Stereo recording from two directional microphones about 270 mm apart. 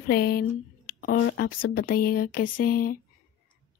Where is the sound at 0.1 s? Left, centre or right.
Left.